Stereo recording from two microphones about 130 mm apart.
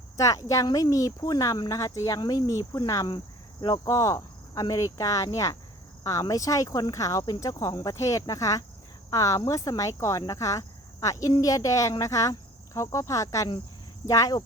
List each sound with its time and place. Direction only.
0.2 s speech: 25° left (ahead or behind)